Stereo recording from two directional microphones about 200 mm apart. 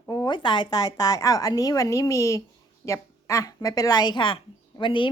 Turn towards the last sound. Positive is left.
turn(degrees=25)  # may be behind; listen again after turning